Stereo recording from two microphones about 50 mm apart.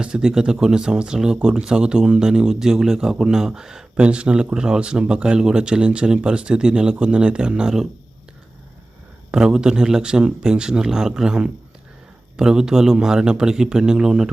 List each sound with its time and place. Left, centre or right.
0.0 s speech: centre
9.3 s speech: centre